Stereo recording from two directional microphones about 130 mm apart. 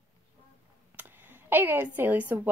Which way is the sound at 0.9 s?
15° right (ahead or behind).